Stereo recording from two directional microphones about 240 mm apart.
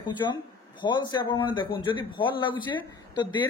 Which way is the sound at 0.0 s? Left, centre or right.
Centre.